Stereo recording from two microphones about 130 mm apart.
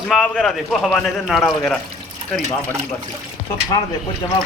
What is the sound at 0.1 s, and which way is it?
Speech, centre (ahead or behind).